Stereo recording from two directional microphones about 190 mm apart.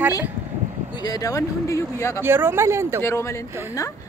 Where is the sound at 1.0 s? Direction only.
20° left (ahead or behind).